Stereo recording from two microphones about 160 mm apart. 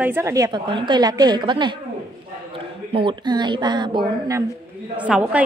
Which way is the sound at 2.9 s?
30° right (ahead or behind).